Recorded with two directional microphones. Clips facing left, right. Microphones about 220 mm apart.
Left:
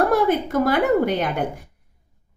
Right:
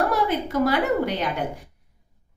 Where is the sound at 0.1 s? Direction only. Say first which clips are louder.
Left 5 dB; 50° left (ahead or behind).